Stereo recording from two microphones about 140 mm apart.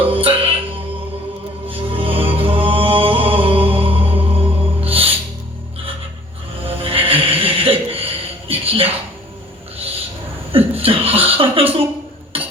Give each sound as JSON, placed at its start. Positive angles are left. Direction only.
{"t": 0.0, "sound": "music", "side_deg": -40}
{"t": 1.7, "sound": "music", "side_deg": -40}
{"t": 6.7, "sound": "a sound", "side_deg": -40}
{"t": 9.7, "sound": "owl", "side_deg": -45}
{"t": 10.5, "sound": "chuckle", "side_deg": -45}
{"t": 12.3, "sound": "a sound", "side_deg": -40}